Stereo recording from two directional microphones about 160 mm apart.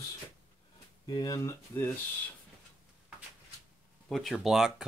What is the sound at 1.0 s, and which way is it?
Speech, 25° left (ahead or behind).